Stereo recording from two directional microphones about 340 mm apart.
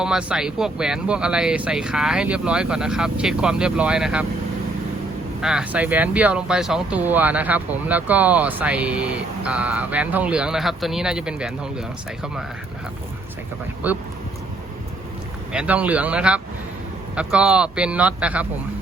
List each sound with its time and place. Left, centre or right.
0.0 s speech: centre
5.4 s speech: centre
13.8 s speech: centre
15.5 s speech: centre